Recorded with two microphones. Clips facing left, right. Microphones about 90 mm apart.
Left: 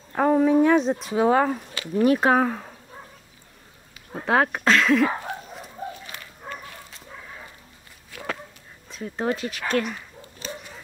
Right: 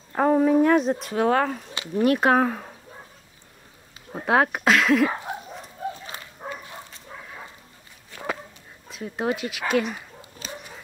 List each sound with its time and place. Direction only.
0.1 s a sound: 5° right (ahead or behind)
2.0 s speech: centre (ahead or behind)
4.3 s speech: 5° right (ahead or behind)
6.4 s dog: 35° right (ahead or behind)
8.1 s dog: centre (ahead or behind)
8.9 s speech: 5° right (ahead or behind)